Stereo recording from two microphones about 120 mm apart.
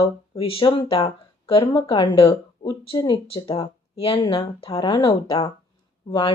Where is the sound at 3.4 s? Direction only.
50° left (ahead or behind).